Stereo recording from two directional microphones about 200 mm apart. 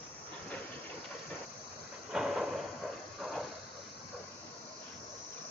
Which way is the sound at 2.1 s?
5° right (ahead or behind).